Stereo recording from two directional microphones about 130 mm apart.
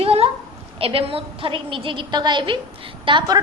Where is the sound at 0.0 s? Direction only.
50° right (ahead or behind).